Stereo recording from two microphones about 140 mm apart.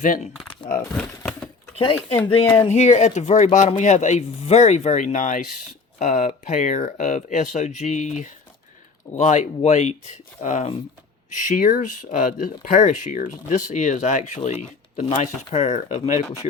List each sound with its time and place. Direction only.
0.0 s speech: 65° left (ahead or behind)
0.9 s a sound: 5° left (ahead or behind)
1.7 s speech: 45° left (ahead or behind)
2.4 s speech: 20° left (ahead or behind)
2.6 s speech: 50° left (ahead or behind)